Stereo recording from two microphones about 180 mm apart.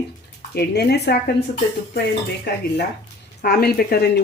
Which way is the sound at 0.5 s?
65° left (ahead or behind).